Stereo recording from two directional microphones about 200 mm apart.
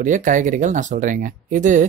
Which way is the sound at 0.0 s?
40° right (ahead or behind).